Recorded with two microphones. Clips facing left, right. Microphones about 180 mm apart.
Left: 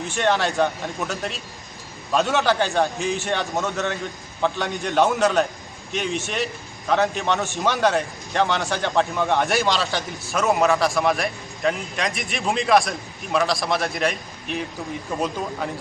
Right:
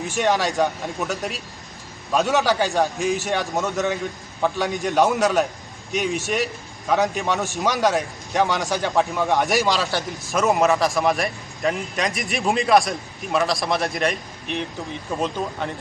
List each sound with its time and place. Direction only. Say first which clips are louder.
0.1 s a man's voice: even; 10° right (ahead or behind)
2.1 s a man's voice: even; 5° right (ahead or behind)